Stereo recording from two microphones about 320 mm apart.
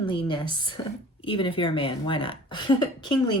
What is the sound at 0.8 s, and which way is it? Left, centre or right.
Speech, centre.